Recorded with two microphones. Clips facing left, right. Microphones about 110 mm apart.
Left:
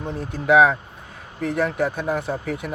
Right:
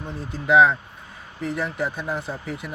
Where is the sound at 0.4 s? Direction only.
55° left (ahead or behind).